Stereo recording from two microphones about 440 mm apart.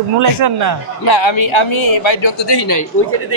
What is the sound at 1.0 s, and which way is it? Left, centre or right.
Speech, left.